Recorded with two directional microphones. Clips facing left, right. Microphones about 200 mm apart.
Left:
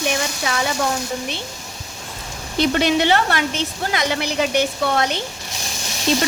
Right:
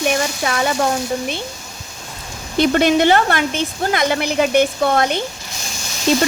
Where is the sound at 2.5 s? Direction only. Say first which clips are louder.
Right 4 dB; 50° right (ahead or behind).